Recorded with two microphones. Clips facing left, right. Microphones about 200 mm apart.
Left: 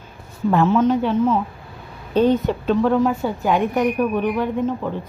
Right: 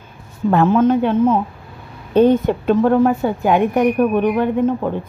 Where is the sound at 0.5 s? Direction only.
55° right (ahead or behind).